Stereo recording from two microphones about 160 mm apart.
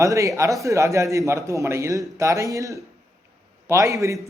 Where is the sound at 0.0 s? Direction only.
20° right (ahead or behind).